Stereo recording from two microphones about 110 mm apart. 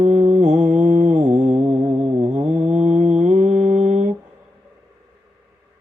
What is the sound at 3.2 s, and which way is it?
Mantra, 90° right.